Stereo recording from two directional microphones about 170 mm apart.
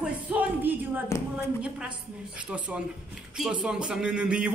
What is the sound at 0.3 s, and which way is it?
Music, 10° right (ahead or behind).